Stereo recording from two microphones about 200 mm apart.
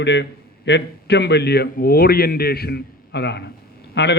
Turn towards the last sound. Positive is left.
turn(degrees=60)  # may be behind; listen again after turning